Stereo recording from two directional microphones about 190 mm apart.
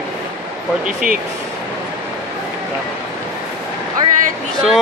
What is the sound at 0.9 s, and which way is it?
Speech, 45° right (ahead or behind).